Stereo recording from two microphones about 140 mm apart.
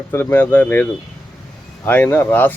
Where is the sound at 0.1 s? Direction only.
20° left (ahead or behind).